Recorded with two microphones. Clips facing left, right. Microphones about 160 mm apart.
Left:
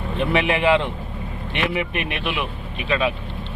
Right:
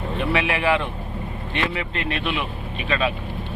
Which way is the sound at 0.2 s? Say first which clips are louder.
Left 3 dB; 20° left (ahead or behind).